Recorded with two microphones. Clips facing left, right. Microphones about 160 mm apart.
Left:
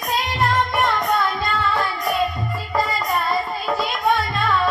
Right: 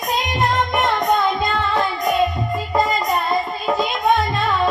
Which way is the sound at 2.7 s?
20° right (ahead or behind).